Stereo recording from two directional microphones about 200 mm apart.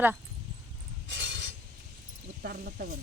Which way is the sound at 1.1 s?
65° right (ahead or behind).